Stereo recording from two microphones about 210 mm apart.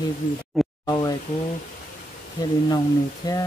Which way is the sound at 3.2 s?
20° left (ahead or behind).